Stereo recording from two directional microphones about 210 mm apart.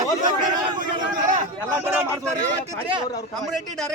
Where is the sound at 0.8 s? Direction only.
40° right (ahead or behind).